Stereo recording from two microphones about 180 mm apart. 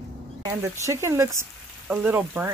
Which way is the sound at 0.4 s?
20° right (ahead or behind).